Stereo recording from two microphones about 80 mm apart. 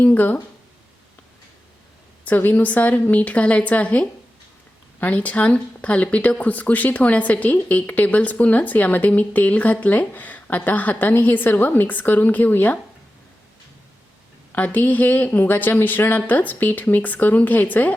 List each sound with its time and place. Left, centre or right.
0.0 s a woman's voice: left
2.2 s a woman's voice: left
14.5 s a woman's voice: left